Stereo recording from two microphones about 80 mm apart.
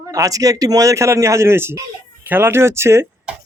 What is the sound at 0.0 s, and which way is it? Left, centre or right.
A man's voice, right.